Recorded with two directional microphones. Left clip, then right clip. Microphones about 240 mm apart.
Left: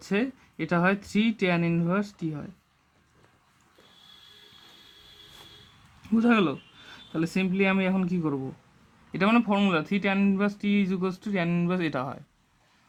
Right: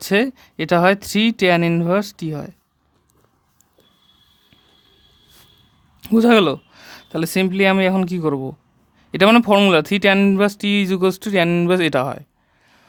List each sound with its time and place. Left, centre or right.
0.0 s speech: right
6.0 s speech: right